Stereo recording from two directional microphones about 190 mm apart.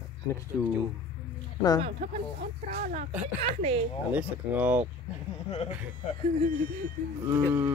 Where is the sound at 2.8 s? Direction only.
45° right (ahead or behind).